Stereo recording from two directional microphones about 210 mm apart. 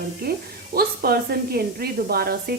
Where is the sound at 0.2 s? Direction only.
45° right (ahead or behind).